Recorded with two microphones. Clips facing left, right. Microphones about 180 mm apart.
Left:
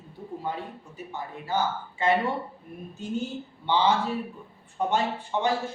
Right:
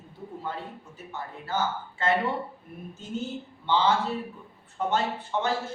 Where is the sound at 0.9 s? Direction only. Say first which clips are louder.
Left 3 dB; 15° left (ahead or behind).